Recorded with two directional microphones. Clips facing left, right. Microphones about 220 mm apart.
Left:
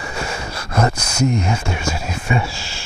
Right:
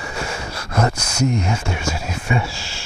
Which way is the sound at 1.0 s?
5° left (ahead or behind).